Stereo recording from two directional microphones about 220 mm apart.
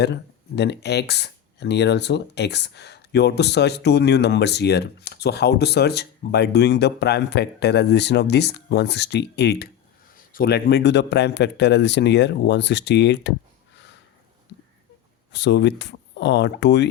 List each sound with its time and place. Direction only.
0.0 s speech: 50° left (ahead or behind)
15.3 s speech: 50° left (ahead or behind)